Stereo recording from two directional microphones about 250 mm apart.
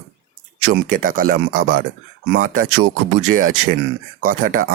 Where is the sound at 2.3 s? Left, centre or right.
Right.